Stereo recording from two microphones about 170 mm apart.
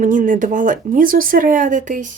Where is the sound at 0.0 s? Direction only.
50° right (ahead or behind).